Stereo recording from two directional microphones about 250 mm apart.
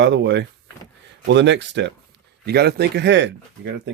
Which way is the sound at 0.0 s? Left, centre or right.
Right.